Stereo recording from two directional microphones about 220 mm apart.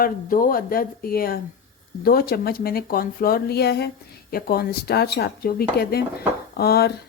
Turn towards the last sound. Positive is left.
turn(degrees=45)  # may be behind; listen again after turning